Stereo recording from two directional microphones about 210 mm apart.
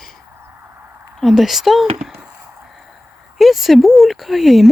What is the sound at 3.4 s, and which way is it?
Speech, centre (ahead or behind).